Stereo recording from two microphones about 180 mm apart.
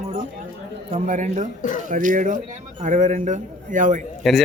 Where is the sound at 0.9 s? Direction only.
40° right (ahead or behind).